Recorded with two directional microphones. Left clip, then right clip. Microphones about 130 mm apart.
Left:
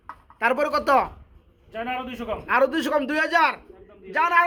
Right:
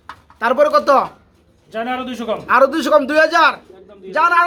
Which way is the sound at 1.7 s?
55° right (ahead or behind).